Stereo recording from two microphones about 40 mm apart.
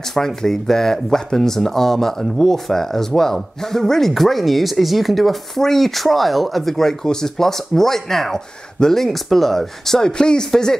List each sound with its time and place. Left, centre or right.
0.1 s speech: centre
10.0 s speech: centre